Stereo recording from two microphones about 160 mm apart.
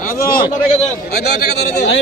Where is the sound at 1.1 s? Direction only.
90° left.